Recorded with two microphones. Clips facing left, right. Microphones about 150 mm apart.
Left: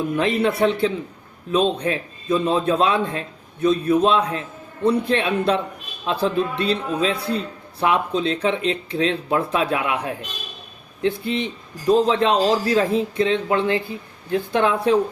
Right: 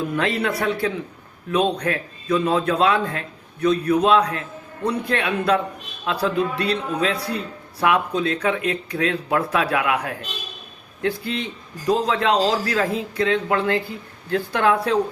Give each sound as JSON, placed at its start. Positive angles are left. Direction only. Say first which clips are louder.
{"t": 0.2, "sound": "a man's voice", "louder": "left 6 dB", "side_deg": 20}